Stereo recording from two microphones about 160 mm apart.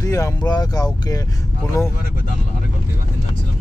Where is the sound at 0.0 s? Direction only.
20° left (ahead or behind).